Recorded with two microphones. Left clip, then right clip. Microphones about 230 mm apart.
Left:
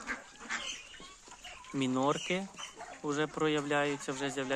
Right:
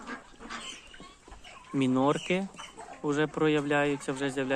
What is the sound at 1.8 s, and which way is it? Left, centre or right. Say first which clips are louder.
Speech: right 4 dB; centre.